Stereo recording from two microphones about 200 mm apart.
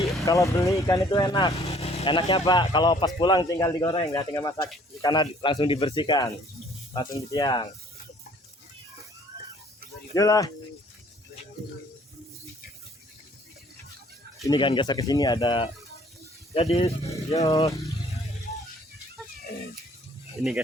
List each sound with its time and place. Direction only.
0.0 s vehicle: centre (ahead or behind)
0.3 s speech: 15° left (ahead or behind)
1.5 s speech: 35° left (ahead or behind)
10.2 s speech: 15° left (ahead or behind)
14.4 s speech: 20° left (ahead or behind)
17.1 s speech: 15° left (ahead or behind)